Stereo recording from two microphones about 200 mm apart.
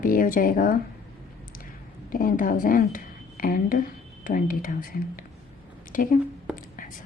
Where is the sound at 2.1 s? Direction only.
45° left (ahead or behind).